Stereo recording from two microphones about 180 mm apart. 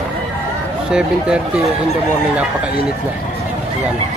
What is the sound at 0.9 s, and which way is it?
Speech, 5° right (ahead or behind).